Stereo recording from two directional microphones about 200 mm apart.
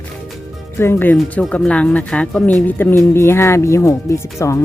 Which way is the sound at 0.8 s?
10° left (ahead or behind).